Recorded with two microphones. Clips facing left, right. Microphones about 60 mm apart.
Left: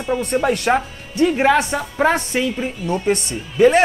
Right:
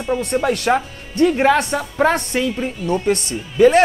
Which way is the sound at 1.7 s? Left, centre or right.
Left.